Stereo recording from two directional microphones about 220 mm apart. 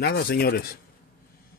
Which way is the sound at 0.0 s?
45° left (ahead or behind).